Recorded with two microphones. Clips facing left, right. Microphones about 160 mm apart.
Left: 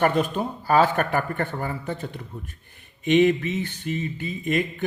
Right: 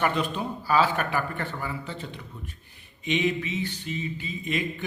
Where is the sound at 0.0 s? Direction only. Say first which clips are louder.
Left 5 dB; 50° left (ahead or behind).